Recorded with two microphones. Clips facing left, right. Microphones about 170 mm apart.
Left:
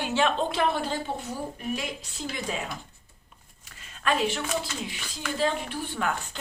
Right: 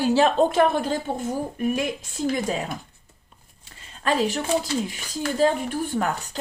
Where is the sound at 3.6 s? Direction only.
30° right (ahead or behind).